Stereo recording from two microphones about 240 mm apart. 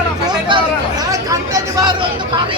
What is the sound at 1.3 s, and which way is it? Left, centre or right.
Speech, centre.